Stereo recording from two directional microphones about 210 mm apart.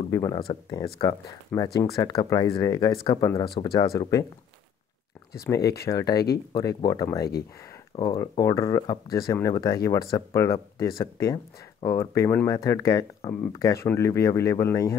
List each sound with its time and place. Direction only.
0.1 s speech: 15° left (ahead or behind)
5.8 s speech: 15° left (ahead or behind)